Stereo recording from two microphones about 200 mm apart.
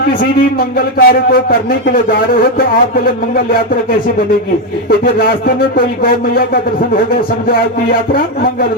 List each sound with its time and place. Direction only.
0.9 s speech: 45° left (ahead or behind)
5.7 s speech: 45° left (ahead or behind)